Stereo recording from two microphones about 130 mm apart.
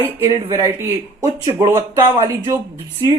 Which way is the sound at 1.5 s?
20° right (ahead or behind).